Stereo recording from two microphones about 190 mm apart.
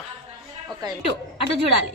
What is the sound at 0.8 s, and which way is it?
Speech, 20° right (ahead or behind).